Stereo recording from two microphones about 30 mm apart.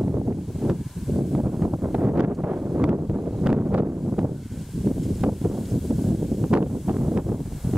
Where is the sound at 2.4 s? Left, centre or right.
Right.